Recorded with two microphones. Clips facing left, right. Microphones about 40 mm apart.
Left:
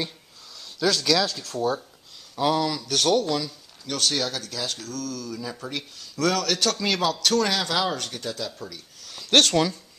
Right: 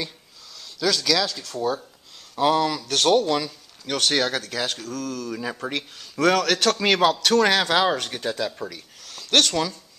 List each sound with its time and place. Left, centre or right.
0.7 s speech: centre
1.5 s speech: centre; by 4.7 s right
4.7 s speech: right
6.1 s a man's voice: right
9.3 s speech: centre